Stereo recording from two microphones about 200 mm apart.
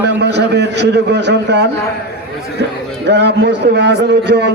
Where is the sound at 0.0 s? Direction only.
55° right (ahead or behind).